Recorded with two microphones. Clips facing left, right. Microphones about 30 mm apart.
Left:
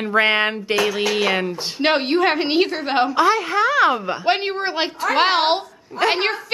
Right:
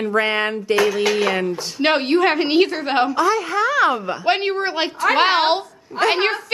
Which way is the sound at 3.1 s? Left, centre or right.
Left.